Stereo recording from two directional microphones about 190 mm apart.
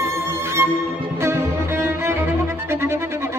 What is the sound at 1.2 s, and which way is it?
Music, 15° right (ahead or behind).